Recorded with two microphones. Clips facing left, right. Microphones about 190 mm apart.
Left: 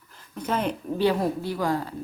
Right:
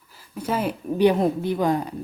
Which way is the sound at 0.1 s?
10° right (ahead or behind).